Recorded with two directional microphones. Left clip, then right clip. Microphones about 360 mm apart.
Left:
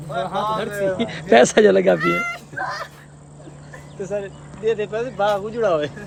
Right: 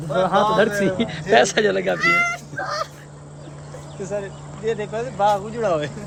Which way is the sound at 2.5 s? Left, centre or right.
Left.